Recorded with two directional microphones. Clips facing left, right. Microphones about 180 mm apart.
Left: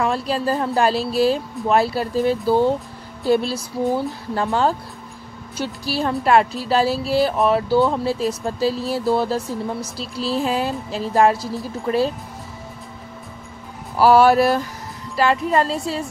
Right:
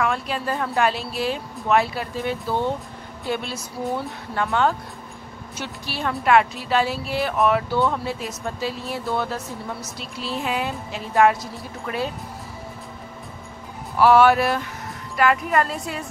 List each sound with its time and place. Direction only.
0.0 s a woman's voice: 35° left (ahead or behind)
13.9 s a woman's voice: 35° left (ahead or behind)